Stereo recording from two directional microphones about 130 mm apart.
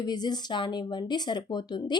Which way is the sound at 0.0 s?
30° left (ahead or behind).